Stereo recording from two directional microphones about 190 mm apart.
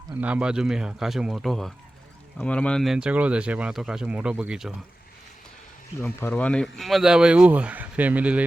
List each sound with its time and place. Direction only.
0.2 s speech: 5° right (ahead or behind)
6.0 s speech: 10° left (ahead or behind); by 8.4 s 5° right (ahead or behind)